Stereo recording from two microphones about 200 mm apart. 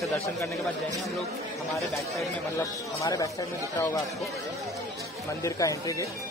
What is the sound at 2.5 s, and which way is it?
Speech, 15° left (ahead or behind).